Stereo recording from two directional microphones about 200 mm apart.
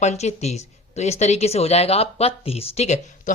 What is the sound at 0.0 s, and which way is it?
Speech, 35° left (ahead or behind).